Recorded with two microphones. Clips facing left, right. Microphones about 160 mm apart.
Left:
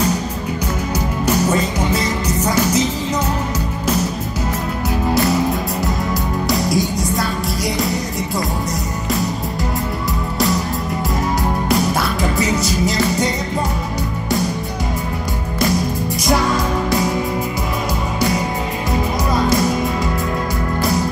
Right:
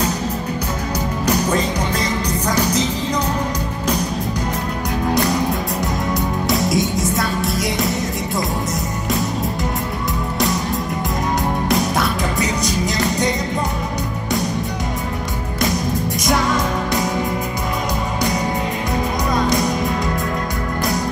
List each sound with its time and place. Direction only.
1.2 s music: 10° left (ahead or behind)
5.3 s music: centre (ahead or behind)
11.7 s music: centre (ahead or behind)